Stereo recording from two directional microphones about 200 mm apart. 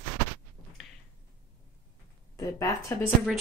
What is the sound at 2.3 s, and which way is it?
Speech, 15° left (ahead or behind).